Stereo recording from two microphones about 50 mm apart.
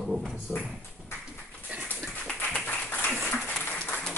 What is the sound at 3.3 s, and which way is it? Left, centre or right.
Applause, centre.